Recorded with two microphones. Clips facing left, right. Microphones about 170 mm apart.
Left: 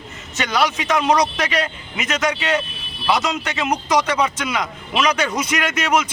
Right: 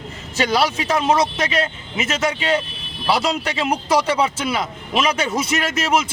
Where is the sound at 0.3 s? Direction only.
30° right (ahead or behind).